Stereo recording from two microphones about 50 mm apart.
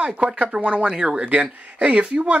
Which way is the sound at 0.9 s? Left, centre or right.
Centre.